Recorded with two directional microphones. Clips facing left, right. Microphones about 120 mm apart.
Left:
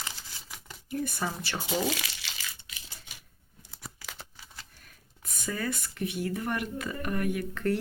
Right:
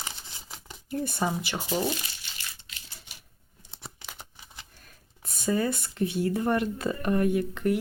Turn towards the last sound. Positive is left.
turn(degrees=-20)  # may be behind; listen again after turning